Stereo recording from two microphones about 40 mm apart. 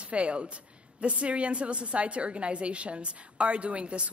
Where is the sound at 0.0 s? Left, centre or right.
Right.